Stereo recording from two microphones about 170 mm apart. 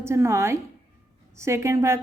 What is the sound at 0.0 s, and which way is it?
A woman's voice, 15° right (ahead or behind).